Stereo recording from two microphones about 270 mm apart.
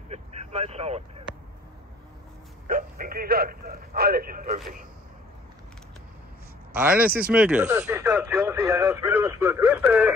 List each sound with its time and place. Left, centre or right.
0.1 s vehicle: right
2.6 s speech: right
6.7 s speech: centre